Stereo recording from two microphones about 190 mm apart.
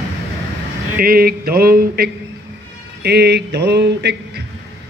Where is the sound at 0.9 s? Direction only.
50° right (ahead or behind).